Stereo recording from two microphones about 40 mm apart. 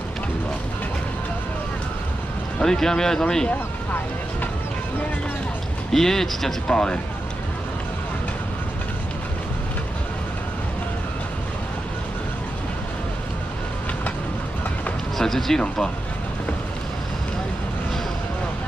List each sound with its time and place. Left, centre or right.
2.6 s speech: centre
5.9 s speech: centre
6.7 s speech: left
15.1 s speech: centre